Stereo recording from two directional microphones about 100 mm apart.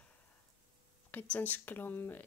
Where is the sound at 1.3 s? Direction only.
20° left (ahead or behind).